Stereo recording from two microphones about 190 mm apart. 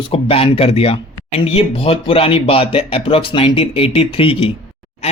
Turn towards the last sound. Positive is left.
turn(degrees=30)  # may be behind; listen again after turning